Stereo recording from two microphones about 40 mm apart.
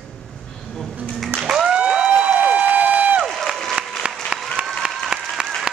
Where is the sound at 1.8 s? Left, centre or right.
Right.